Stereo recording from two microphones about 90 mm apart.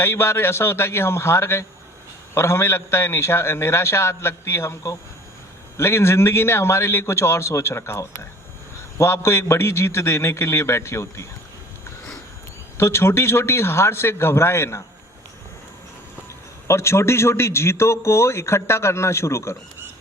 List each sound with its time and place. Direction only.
0.0 s a man's voice: 30° left (ahead or behind)
12.7 s a man's voice: 30° left (ahead or behind)
16.6 s speech: 30° left (ahead or behind)